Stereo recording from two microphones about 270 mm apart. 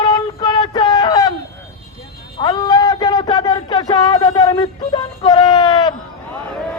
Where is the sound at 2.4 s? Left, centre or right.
Centre.